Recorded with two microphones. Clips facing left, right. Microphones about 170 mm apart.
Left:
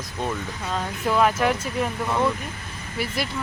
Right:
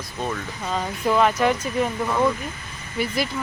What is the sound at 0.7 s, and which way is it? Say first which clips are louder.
Speech: right 3 dB; centre (ahead or behind).